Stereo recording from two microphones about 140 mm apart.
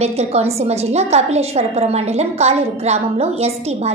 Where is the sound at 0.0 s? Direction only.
50° right (ahead or behind).